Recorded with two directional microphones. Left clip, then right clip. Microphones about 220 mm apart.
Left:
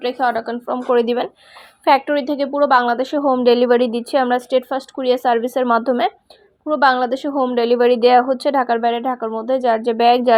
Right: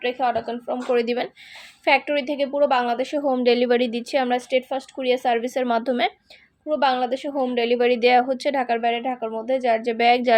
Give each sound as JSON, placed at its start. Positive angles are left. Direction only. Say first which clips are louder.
{"t": 0.0, "sound": "a woman's voice", "louder": "left 4 dB", "side_deg": 25}
{"t": 5.5, "sound": "a woman's voice", "louder": "left 5 dB", "side_deg": 5}
{"t": 6.7, "sound": "a woman's voice", "louder": "left 6 dB", "side_deg": 25}